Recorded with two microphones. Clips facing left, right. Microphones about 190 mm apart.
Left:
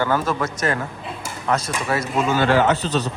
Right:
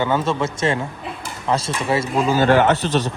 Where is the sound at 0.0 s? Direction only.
25° right (ahead or behind).